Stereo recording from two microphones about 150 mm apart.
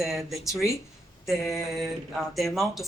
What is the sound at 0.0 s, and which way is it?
Speech, centre (ahead or behind).